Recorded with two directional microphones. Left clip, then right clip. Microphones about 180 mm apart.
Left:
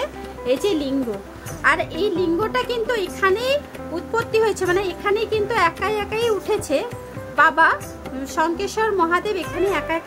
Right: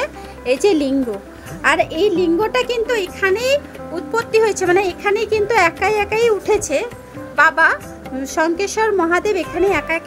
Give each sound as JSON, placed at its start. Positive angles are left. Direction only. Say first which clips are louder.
{"t": 0.0, "sound": "music", "louder": "right 3 dB", "side_deg": -30}
{"t": 1.6, "sound": "a child's voice", "louder": "right 4 dB", "side_deg": -20}